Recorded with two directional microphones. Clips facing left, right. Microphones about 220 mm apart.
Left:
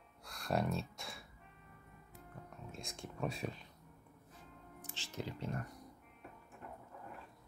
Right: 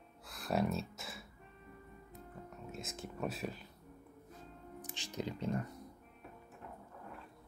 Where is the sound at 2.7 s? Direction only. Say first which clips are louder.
Right 3 dB; 5° right (ahead or behind).